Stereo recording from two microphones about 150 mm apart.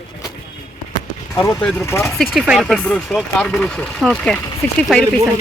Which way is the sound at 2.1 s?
Centre (ahead or behind).